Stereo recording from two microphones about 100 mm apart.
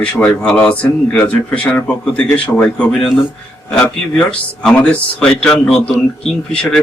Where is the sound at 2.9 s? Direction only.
5° left (ahead or behind).